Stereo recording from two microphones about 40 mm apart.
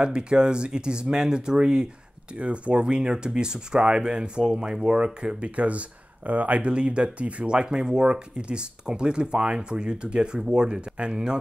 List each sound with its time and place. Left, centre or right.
0.0 s speech: right
6.7 s speech: right